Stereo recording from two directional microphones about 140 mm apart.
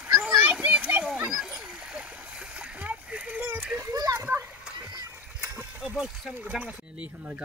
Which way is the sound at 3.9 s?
25° right (ahead or behind).